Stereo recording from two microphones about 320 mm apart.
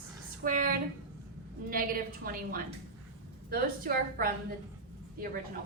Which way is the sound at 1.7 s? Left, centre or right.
Right.